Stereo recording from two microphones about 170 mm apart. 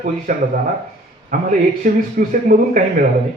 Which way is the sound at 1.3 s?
50° right (ahead or behind).